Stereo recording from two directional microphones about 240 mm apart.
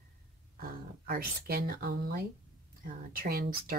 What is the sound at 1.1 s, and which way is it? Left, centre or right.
Speech, right.